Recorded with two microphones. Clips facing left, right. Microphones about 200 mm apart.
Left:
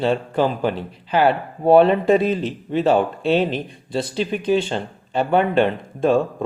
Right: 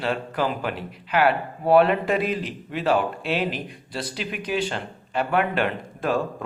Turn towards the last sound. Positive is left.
turn(degrees=25)  # may be behind; listen again after turning